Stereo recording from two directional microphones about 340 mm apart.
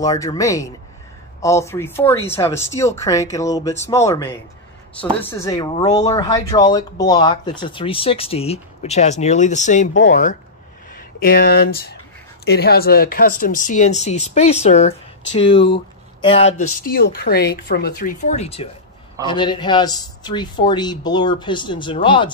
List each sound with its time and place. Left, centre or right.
0.0 s speech: centre
9.9 s speech: left; by 22.3 s centre